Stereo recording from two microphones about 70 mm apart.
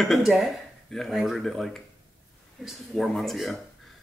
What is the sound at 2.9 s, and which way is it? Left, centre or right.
Speech, centre.